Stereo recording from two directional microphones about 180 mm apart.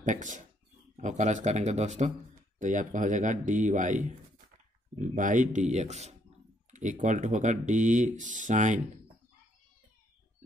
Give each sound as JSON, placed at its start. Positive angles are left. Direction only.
{"t": 0.0, "sound": "speech", "side_deg": -45}